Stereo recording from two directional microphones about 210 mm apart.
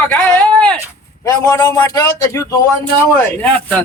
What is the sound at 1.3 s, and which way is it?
Speech, 20° left (ahead or behind).